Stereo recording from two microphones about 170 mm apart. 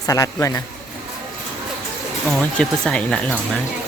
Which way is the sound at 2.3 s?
5° left (ahead or behind).